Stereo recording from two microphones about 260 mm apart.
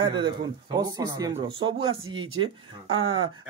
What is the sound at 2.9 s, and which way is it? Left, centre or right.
Speech, right.